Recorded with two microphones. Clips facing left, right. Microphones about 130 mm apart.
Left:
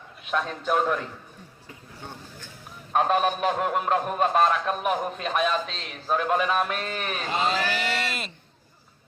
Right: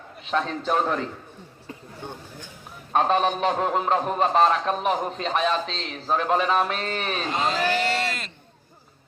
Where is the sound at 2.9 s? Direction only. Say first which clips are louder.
Right 1 dB; 5° left (ahead or behind).